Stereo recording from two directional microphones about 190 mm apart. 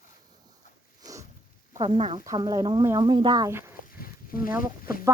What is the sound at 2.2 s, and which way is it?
Speech, 20° right (ahead or behind).